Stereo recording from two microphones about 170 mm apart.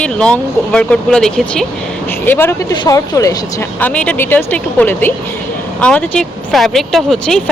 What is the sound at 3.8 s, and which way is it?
Speech, 10° left (ahead or behind).